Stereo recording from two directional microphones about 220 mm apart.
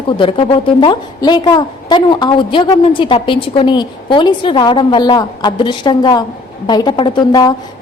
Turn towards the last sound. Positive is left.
turn(degrees=20)  # may be behind; listen again after turning